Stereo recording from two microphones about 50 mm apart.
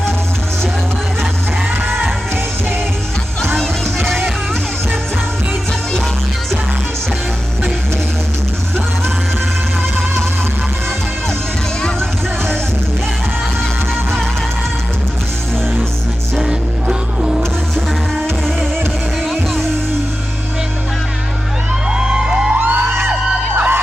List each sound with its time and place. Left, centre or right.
3.6 s music: centre
16.4 s music: centre
18.2 s music: centre
21.8 s vehicle: centre
22.5 s music: right
22.9 s music: right
23.6 s a sound: right